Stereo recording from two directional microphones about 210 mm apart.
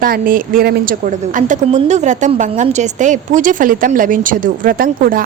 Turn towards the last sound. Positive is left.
turn(degrees=-45)  # may be behind; listen again after turning